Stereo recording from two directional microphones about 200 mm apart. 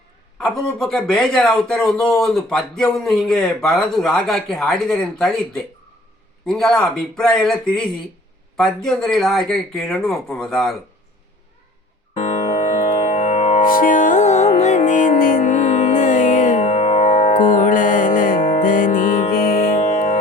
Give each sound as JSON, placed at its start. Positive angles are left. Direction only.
{"t": 0.3, "sound": "speech", "side_deg": 5}
{"t": 13.1, "sound": "music", "side_deg": 40}